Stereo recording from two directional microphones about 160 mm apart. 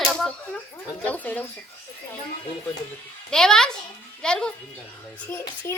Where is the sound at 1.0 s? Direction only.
10° left (ahead or behind).